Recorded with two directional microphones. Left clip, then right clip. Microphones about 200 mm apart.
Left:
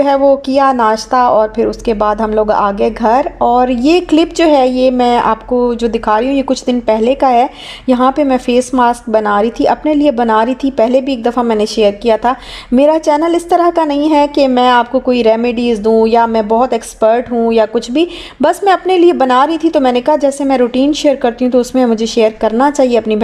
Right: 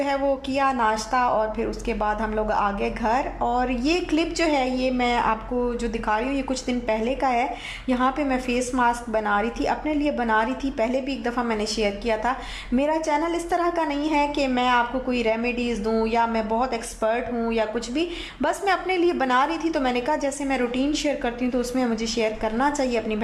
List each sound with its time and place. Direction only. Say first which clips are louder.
0.0 s a woman's voice: left 14 dB; 45° left (ahead or behind)